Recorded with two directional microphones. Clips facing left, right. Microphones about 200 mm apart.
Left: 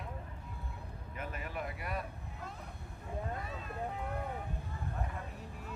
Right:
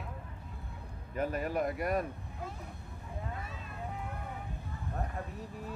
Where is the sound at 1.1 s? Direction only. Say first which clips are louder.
Right 10 dB; 40° right (ahead or behind).